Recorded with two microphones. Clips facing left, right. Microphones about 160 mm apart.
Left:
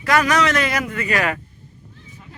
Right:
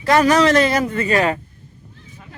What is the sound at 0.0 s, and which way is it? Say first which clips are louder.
A man's voice: right 4 dB; 30° right (ahead or behind).